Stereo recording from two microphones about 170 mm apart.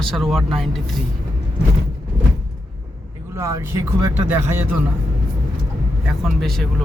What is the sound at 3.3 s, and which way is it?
Speech, 20° right (ahead or behind).